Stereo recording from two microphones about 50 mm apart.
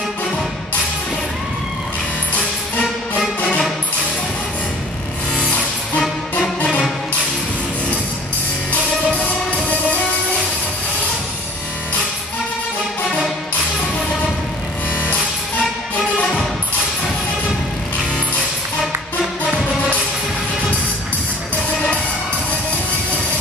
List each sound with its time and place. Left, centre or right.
5.4 s music: left